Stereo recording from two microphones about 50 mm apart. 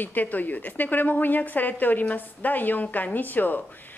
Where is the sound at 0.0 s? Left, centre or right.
Left.